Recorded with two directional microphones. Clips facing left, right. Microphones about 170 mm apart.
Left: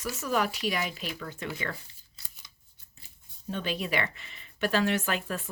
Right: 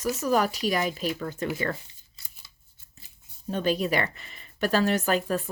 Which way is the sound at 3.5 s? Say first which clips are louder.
Right 6 dB; 40° right (ahead or behind).